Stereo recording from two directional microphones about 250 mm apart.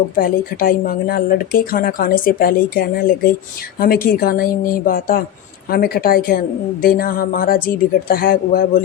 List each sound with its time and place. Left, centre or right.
0.2 s a woman's voice: left